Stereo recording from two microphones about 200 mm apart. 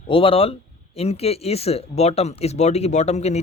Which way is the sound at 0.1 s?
25° left (ahead or behind).